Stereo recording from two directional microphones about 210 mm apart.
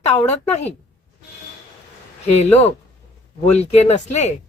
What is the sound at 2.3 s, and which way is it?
Speech, 30° left (ahead or behind).